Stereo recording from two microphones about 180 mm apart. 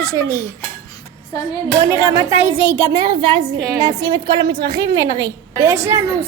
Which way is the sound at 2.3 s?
10° right (ahead or behind).